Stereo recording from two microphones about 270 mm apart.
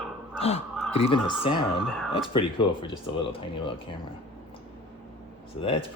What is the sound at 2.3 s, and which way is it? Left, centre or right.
Speech, centre.